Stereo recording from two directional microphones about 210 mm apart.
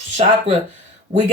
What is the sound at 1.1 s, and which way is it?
Speech, 30° right (ahead or behind).